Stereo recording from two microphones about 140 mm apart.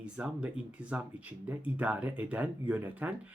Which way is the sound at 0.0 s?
5° right (ahead or behind).